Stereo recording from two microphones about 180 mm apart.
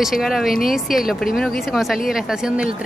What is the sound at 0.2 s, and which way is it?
Speech, centre (ahead or behind).